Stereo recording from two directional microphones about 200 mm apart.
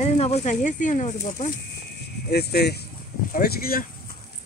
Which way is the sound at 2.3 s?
55° left (ahead or behind).